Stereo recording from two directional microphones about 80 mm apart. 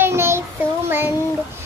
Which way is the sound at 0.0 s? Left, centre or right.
Right.